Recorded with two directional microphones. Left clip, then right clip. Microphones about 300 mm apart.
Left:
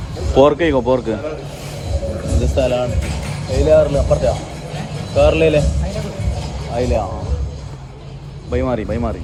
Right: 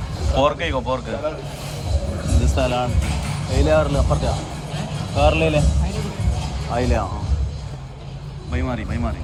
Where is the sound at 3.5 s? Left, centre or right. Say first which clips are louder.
Left 6 dB; right.